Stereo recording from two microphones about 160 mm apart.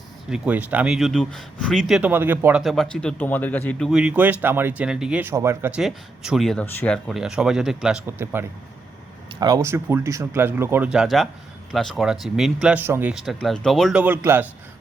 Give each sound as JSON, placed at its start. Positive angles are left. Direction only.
{"t": 0.3, "sound": "speech", "side_deg": -5}
{"t": 2.0, "sound": "speech", "side_deg": -10}
{"t": 5.3, "sound": "speech", "side_deg": -15}
{"t": 5.8, "sound": "speech", "side_deg": 0}
{"t": 9.3, "sound": "speech", "side_deg": -25}
{"t": 13.2, "sound": "speech", "side_deg": 5}
{"t": 14.0, "sound": "speech", "side_deg": -10}